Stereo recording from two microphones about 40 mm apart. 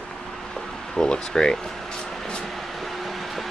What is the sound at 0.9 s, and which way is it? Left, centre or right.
Speech, centre.